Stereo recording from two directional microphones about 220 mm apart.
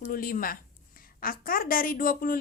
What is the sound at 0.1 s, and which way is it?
A woman's voice, 40° left (ahead or behind).